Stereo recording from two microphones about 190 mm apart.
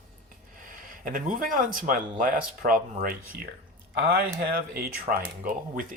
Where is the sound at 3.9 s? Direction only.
60° right (ahead or behind).